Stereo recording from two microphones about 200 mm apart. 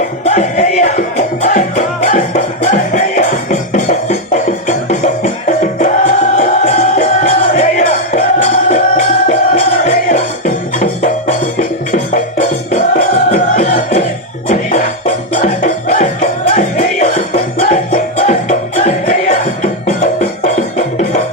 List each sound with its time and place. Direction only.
0.3 s music: 35° left (ahead or behind)